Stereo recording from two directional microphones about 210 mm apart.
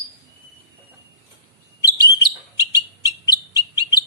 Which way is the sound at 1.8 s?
15° left (ahead or behind).